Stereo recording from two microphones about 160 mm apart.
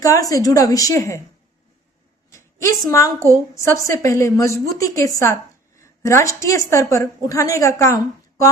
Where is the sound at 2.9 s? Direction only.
20° left (ahead or behind).